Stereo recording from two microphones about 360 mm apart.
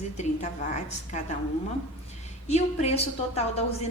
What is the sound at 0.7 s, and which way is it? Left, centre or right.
Speech, centre.